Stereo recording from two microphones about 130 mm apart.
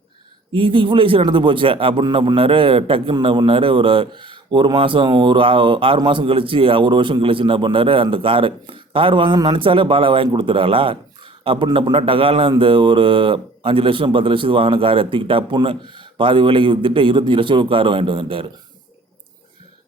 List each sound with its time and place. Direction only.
0.5 s a man's voice: 40° right (ahead or behind)